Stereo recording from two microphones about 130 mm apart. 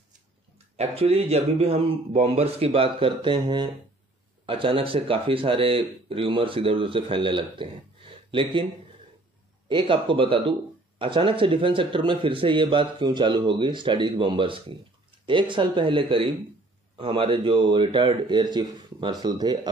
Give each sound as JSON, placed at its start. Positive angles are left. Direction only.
{"t": 0.7, "sound": "speech", "side_deg": -55}
{"t": 9.7, "sound": "a man's voice", "side_deg": -40}